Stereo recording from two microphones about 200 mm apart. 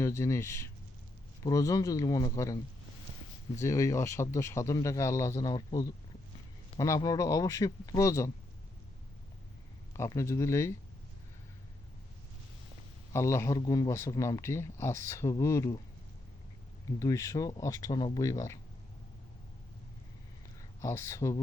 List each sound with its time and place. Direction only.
0.0 s speech: 15° left (ahead or behind)
3.6 s speech: 15° left (ahead or behind)
10.0 s speech: 15° left (ahead or behind)
13.1 s speech: 15° left (ahead or behind)
17.0 s speech: 15° left (ahead or behind)
20.6 s speech: 15° left (ahead or behind)